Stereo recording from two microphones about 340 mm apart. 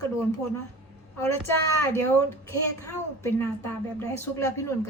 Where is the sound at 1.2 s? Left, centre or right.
Centre.